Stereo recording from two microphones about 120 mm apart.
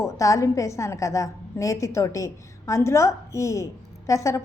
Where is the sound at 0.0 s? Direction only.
25° left (ahead or behind).